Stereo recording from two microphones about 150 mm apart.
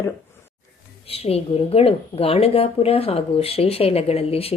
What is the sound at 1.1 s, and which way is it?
A woman's voice, 40° left (ahead or behind).